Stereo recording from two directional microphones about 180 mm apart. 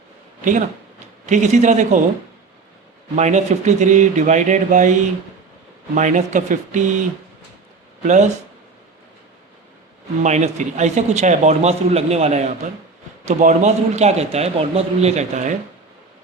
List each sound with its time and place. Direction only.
1.3 s a man's voice: 40° right (ahead or behind)
3.2 s speech: 40° right (ahead or behind)
8.0 s a man's voice: 40° right (ahead or behind)
10.2 s a man's voice: 40° right (ahead or behind)